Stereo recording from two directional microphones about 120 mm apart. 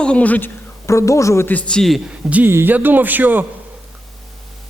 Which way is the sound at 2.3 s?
20° right (ahead or behind).